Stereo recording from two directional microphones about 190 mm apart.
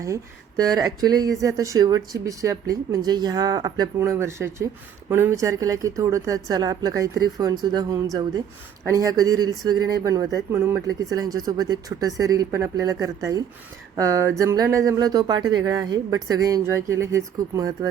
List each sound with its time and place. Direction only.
0.6 s speech: 20° right (ahead or behind)